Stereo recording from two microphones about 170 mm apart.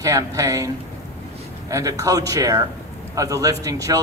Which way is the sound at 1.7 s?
20° right (ahead or behind).